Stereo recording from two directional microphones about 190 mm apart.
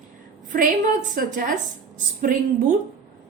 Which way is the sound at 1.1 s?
45° right (ahead or behind).